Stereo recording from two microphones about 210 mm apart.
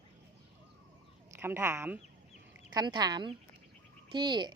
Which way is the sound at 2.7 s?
20° right (ahead or behind).